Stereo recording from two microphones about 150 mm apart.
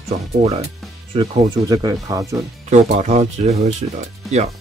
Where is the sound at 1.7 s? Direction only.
25° right (ahead or behind).